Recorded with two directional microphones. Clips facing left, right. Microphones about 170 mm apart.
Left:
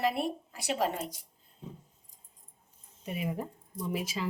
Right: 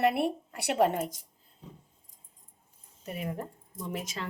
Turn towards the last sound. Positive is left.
turn(degrees=10)  # may be behind; listen again after turning